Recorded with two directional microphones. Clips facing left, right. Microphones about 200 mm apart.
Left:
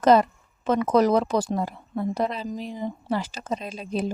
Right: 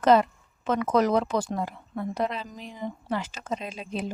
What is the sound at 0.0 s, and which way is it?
Speech, 40° left (ahead or behind).